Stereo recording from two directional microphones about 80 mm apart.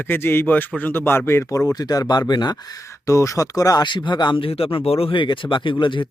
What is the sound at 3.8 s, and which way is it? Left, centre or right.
Speech, left.